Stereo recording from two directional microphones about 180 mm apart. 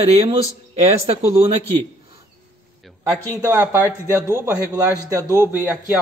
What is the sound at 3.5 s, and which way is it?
Speech, 15° right (ahead or behind).